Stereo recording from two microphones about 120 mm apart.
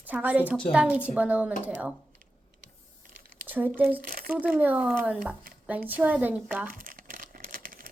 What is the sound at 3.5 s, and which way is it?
Speech, 15° right (ahead or behind).